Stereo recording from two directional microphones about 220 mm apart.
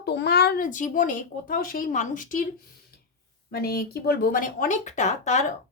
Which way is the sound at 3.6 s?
45° left (ahead or behind).